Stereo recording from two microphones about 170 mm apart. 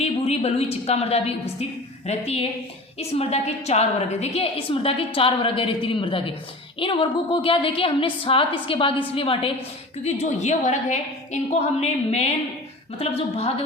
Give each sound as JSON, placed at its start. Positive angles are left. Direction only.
{"t": 0.0, "sound": "speech", "side_deg": 40}